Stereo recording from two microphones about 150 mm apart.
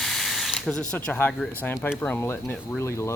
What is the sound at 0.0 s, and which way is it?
Speech, centre (ahead or behind).